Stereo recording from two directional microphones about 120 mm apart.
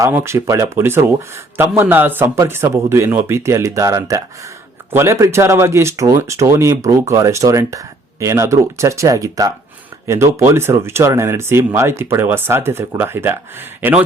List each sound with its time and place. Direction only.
0.0 s speech: 20° right (ahead or behind)